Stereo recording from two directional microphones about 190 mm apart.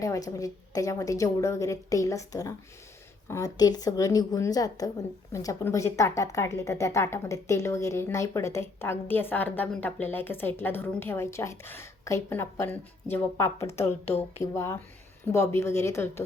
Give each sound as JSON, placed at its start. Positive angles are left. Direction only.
{"t": 0.0, "sound": "a woman's voice", "side_deg": 15}
{"t": 14.0, "sound": "speech", "side_deg": 35}
{"t": 14.4, "sound": "a woman's voice", "side_deg": 15}